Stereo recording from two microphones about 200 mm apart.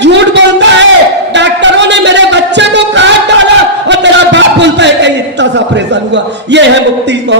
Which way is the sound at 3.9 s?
60° right (ahead or behind).